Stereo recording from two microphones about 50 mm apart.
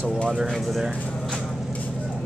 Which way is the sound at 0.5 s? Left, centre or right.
Centre.